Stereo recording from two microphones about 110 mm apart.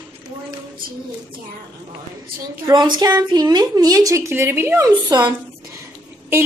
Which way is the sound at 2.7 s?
40° right (ahead or behind).